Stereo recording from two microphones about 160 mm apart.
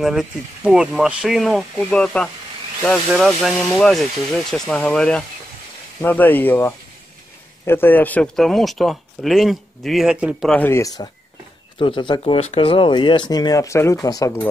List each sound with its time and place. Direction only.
0.0 s speech: centre (ahead or behind)
10.5 s speech: 15° left (ahead or behind)